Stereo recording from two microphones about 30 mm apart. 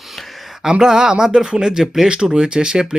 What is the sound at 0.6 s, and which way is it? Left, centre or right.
Speech, right.